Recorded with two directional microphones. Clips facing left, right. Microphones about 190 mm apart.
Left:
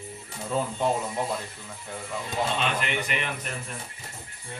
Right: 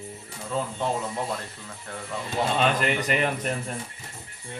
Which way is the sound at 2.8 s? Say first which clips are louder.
Right 5 dB; 40° right (ahead or behind).